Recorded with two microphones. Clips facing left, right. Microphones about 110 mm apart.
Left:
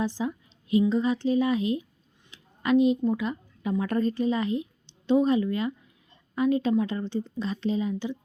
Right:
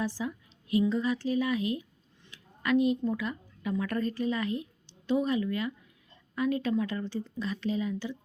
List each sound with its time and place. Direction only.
0.0 s a woman's voice: 20° left (ahead or behind)